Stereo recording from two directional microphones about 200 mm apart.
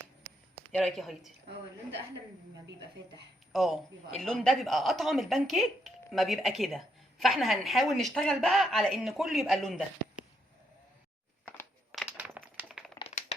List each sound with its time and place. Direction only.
0.7 s speech: 5° left (ahead or behind)
3.5 s a man's voice: centre (ahead or behind)
11.4 s a sound: 5° left (ahead or behind)
13.0 s typing: 30° left (ahead or behind)